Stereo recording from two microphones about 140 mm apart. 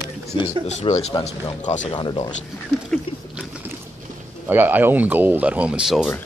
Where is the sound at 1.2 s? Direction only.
55° left (ahead or behind).